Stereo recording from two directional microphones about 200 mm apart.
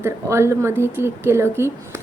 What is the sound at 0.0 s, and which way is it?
A woman's voice, 15° right (ahead or behind).